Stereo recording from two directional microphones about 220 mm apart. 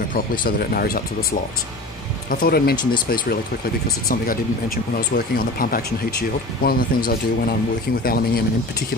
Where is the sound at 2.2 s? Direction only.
40° left (ahead or behind).